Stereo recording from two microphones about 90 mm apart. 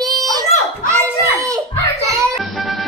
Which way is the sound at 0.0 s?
45° right (ahead or behind).